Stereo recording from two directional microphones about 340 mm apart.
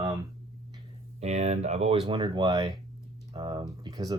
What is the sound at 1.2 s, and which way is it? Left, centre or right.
Speech, centre.